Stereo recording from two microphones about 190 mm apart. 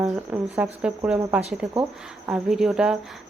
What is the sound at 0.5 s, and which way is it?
Speech, 5° right (ahead or behind).